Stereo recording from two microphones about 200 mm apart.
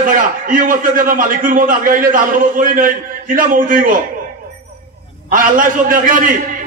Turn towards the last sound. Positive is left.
turn(degrees=-40)  # may be behind; listen again after turning